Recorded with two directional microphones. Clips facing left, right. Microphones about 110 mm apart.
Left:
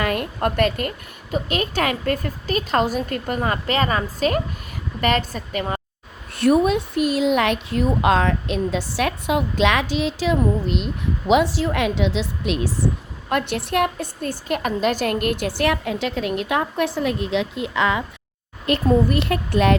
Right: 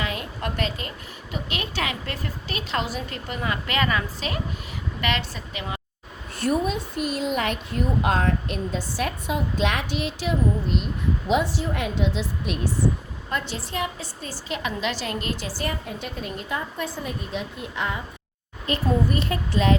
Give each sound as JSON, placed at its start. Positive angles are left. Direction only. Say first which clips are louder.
{"t": 0.0, "sound": "a woman's voice", "louder": "left 8 dB", "side_deg": 55}
{"t": 6.3, "sound": "a woman's voice", "louder": "left 7 dB", "side_deg": 70}
{"t": 13.3, "sound": "a woman's voice", "louder": "left 8 dB", "side_deg": 60}
{"t": 18.6, "sound": "a woman's voice", "louder": "left 6 dB", "side_deg": 70}